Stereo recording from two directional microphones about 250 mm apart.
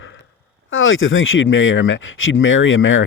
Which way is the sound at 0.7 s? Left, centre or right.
Left.